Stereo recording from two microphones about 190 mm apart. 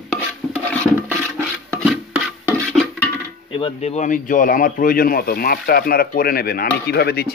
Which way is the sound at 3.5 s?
30° left (ahead or behind).